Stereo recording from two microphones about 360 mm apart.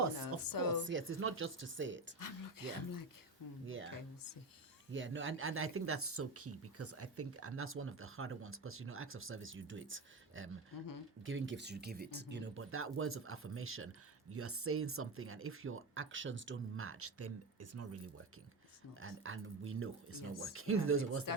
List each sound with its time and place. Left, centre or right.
0.4 s a woman's voice: left
0.9 s speech: right
2.1 s speech: left
3.7 s speech: right